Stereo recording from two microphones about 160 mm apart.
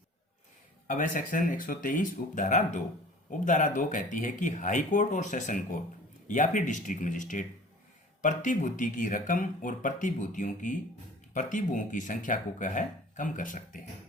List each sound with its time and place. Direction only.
0.9 s speech: 55° left (ahead or behind)